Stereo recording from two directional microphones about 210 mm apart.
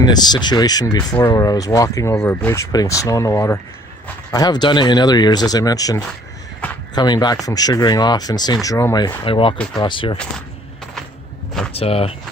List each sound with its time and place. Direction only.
0.0 s speech: 20° left (ahead or behind)
11.7 s speech: 25° left (ahead or behind)